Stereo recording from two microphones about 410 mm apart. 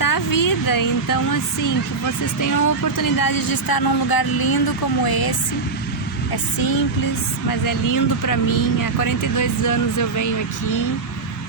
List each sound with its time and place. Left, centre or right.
0.0 s speech: left
6.3 s speech: left